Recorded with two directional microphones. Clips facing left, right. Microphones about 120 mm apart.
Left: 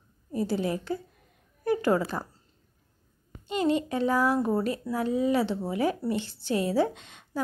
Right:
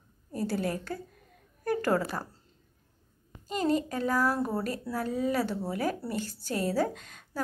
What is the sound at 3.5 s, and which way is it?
Speech, 40° right (ahead or behind).